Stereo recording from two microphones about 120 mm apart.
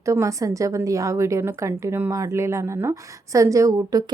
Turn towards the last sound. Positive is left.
turn(degrees=-30)  # may be behind; listen again after turning